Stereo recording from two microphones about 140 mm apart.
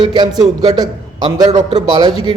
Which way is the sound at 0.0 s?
30° right (ahead or behind).